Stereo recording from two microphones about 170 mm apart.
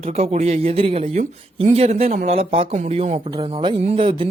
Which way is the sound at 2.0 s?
50° right (ahead or behind).